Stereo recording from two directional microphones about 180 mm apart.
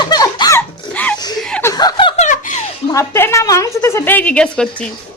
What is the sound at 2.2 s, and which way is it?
Giggle, 45° left (ahead or behind).